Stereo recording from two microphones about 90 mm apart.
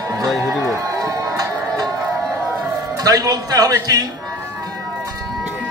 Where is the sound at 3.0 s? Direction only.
45° right (ahead or behind).